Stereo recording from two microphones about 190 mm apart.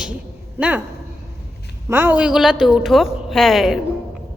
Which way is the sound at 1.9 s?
10° right (ahead or behind).